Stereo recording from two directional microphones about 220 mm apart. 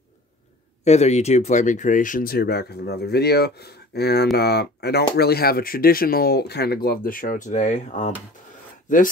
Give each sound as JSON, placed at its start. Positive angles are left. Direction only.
{"t": 0.8, "sound": "speech", "side_deg": 30}